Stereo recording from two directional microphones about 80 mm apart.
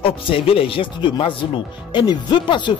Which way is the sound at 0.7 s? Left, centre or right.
Left.